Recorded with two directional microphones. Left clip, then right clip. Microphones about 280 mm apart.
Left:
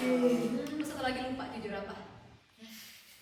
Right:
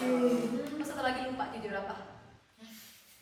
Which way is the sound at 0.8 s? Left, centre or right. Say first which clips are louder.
Right 3 dB; centre.